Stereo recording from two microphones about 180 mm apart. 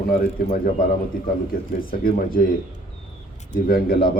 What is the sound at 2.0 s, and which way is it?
Speech, 50° left (ahead or behind).